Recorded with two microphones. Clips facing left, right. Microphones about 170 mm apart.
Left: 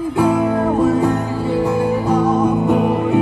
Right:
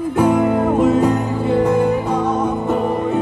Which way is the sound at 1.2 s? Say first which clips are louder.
Right 1 dB; 20° right (ahead or behind).